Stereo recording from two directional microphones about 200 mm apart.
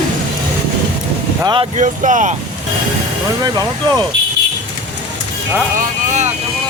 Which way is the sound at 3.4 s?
20° right (ahead or behind).